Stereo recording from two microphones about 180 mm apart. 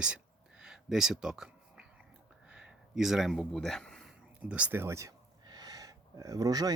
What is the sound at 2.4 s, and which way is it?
Speech, 5° right (ahead or behind).